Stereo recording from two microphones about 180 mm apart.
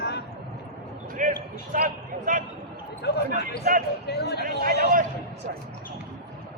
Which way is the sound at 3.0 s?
70° left (ahead or behind).